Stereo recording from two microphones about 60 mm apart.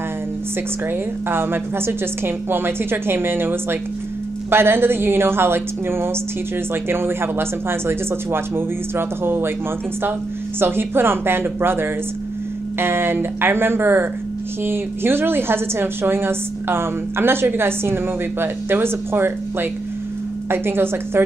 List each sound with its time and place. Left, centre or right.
1.3 s a woman's voice: right
10.6 s a woman's voice: right